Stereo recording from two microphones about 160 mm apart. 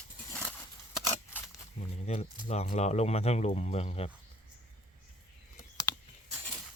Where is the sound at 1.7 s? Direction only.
40° left (ahead or behind).